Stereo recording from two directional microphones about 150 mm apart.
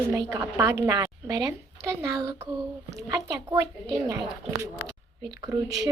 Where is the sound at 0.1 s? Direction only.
20° right (ahead or behind).